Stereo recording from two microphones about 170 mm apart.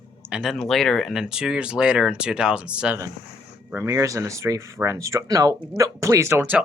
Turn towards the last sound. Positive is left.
turn(degrees=-15)  # may be behind; listen again after turning